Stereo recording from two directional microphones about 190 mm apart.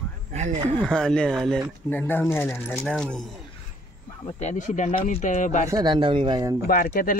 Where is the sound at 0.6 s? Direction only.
25° right (ahead or behind).